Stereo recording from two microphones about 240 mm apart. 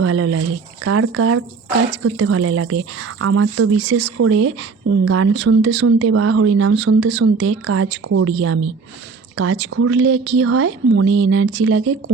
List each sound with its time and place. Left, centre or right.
0.0 s speech: right